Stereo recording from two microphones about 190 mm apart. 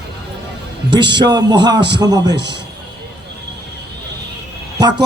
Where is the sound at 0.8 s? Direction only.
25° right (ahead or behind).